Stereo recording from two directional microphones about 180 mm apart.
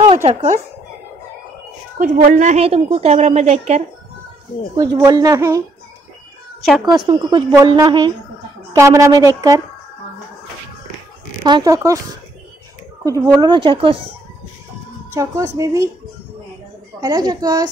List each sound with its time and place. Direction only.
0.2 s a woman's voice: 35° right (ahead or behind)
2.0 s a woman's voice: 45° right (ahead or behind)
4.7 s speech: 20° right (ahead or behind)
6.8 s a woman's voice: 25° right (ahead or behind)
11.4 s speech: 20° right (ahead or behind)
13.0 s speech: 20° right (ahead or behind)
15.1 s a woman's voice: 15° right (ahead or behind)
17.0 s speech: 20° right (ahead or behind)